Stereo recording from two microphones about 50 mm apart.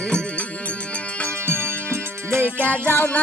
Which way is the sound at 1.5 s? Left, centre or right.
Right.